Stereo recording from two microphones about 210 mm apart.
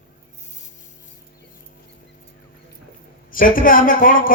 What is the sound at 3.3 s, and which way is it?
A man's voice, 40° left (ahead or behind).